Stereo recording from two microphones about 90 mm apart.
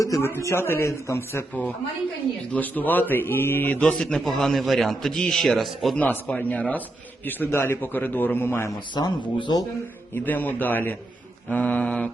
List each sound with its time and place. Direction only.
0.0 s speech: 40° left (ahead or behind)
0.3 s a man's voice: 30° left (ahead or behind)
2.5 s a man's voice: 20° left (ahead or behind); by 6.0 s centre (ahead or behind)
6.0 s a man's voice: 20° left (ahead or behind)
9.0 s speech: 50° left (ahead or behind)
10.2 s a man's voice: 20° left (ahead or behind)